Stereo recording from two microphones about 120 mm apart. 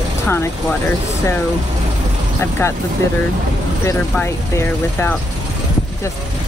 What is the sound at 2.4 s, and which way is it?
Speech, 20° left (ahead or behind).